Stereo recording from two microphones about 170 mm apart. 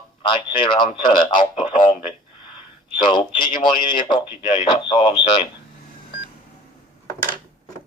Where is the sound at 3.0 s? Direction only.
25° left (ahead or behind).